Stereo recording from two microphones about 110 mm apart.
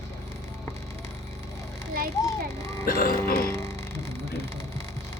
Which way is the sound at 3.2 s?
25° left (ahead or behind).